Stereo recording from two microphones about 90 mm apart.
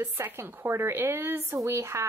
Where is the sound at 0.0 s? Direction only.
25° right (ahead or behind).